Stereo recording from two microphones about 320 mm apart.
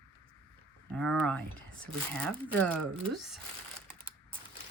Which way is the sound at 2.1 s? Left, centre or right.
Centre.